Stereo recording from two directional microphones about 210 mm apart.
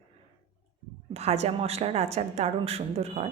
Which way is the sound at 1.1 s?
30° right (ahead or behind).